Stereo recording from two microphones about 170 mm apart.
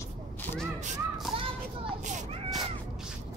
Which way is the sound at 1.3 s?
Centre (ahead or behind).